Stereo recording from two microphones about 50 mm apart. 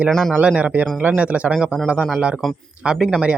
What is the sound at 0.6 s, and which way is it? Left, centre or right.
Speech, right.